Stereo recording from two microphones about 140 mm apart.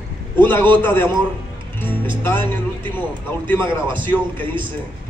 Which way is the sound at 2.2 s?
15° left (ahead or behind).